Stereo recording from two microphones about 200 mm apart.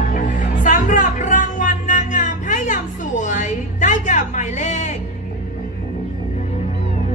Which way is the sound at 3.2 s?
40° left (ahead or behind).